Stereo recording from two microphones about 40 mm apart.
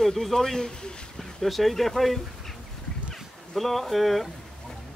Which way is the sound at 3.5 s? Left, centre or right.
Centre.